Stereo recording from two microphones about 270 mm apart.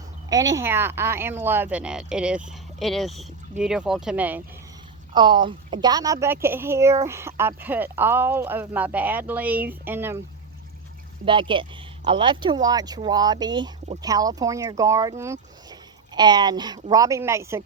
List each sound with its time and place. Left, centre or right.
0.3 s a woman's voice: centre
5.1 s a woman's voice: centre
11.3 s a woman's voice: centre